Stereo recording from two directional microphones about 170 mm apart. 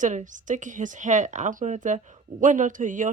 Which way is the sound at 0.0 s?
45° right (ahead or behind).